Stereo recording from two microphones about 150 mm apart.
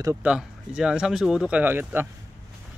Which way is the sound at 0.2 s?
5° right (ahead or behind).